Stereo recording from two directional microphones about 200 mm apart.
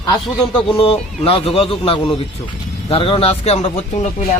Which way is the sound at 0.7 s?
30° left (ahead or behind).